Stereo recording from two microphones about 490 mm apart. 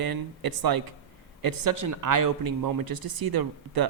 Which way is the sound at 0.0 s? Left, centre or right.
Right.